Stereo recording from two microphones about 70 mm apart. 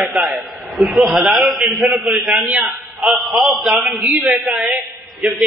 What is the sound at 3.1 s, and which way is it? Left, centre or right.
Speech, centre.